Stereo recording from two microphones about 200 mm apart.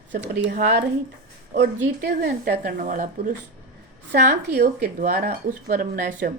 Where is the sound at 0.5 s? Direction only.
40° right (ahead or behind).